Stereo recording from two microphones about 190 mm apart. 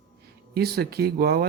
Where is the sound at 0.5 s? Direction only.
55° right (ahead or behind).